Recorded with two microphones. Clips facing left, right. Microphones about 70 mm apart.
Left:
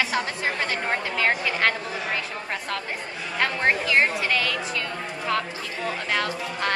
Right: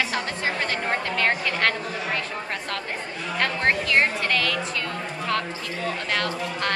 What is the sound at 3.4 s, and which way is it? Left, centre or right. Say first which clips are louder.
Speech: left 1 dB; centre.